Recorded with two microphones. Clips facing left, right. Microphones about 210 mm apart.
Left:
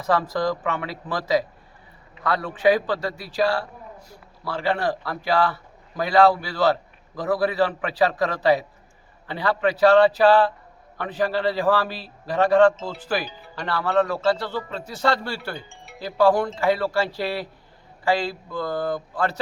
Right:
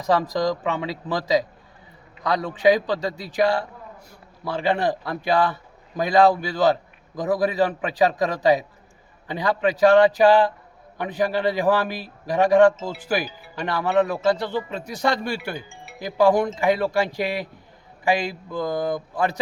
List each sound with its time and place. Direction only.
0.0 s a man's voice: 15° right (ahead or behind)